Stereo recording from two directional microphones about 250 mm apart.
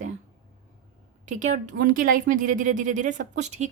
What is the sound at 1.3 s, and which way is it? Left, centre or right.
Speech, right.